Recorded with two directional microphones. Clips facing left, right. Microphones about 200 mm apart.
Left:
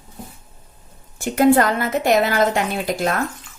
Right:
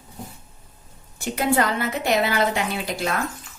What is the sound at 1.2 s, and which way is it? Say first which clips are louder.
A woman's voice: left 7 dB; 50° left (ahead or behind).